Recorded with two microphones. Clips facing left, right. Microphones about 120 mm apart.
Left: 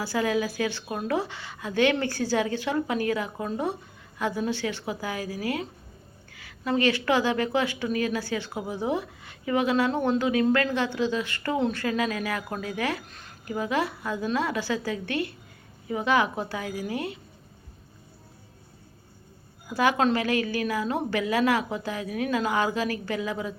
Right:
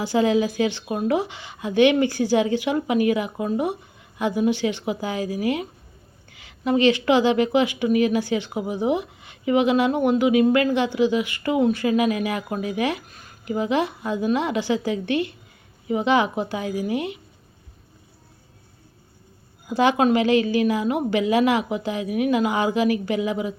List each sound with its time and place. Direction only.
0.0 s speech: 20° right (ahead or behind)
13.1 s speech: 5° right (ahead or behind)
13.4 s a woman's voice: 20° right (ahead or behind)
19.6 s speech: 20° right (ahead or behind)